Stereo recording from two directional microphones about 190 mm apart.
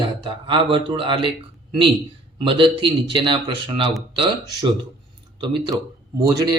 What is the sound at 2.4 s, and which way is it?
A man's voice, 25° right (ahead or behind).